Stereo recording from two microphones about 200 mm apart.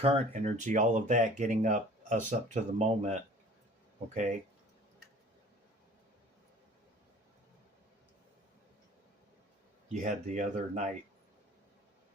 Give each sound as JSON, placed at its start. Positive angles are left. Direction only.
{"t": 0.0, "sound": "speech", "side_deg": -30}
{"t": 9.9, "sound": "speech", "side_deg": -35}